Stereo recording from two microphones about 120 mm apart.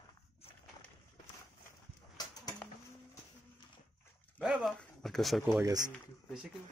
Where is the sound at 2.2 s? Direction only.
35° left (ahead or behind).